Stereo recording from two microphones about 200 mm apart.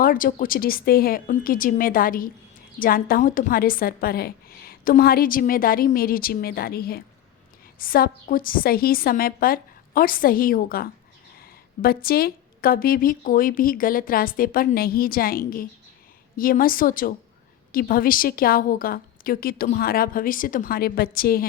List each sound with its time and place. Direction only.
0.0 s a woman's voice: 45° left (ahead or behind)